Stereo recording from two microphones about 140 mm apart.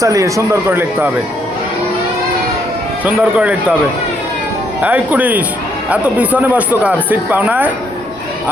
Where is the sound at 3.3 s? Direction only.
10° right (ahead or behind).